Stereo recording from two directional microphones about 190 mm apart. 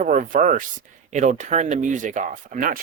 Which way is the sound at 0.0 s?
40° right (ahead or behind).